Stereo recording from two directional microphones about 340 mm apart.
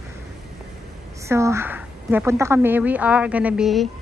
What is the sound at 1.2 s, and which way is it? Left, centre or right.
A woman's voice, centre.